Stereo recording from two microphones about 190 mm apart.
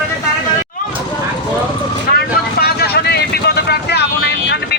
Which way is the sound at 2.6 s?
55° left (ahead or behind).